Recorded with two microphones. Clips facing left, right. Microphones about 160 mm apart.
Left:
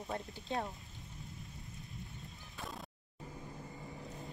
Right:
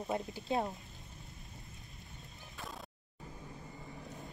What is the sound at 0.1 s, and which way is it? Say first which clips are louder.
Speech: right 4 dB; 20° right (ahead or behind).